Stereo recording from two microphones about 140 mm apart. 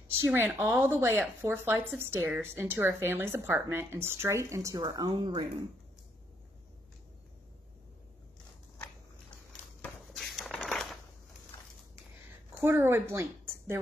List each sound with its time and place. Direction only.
0.2 s speech: 15° right (ahead or behind); by 5.5 s 35° right (ahead or behind)
9.8 s a sound: centre (ahead or behind)
12.5 s a woman's voice: 15° right (ahead or behind)